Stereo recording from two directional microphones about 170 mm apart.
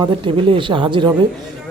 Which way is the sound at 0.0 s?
30° right (ahead or behind).